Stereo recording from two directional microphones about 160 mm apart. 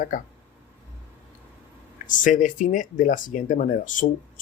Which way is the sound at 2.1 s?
55° left (ahead or behind).